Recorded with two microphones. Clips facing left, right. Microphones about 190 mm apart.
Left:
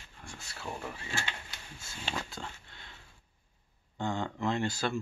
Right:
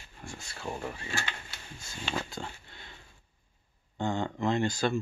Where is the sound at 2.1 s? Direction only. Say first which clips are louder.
Right 5 dB; 5° right (ahead or behind).